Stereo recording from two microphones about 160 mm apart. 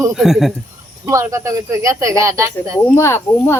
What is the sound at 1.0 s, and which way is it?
Speech, 15° right (ahead or behind).